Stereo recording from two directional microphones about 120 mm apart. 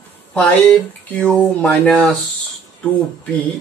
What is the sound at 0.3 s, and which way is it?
Speech, 15° left (ahead or behind).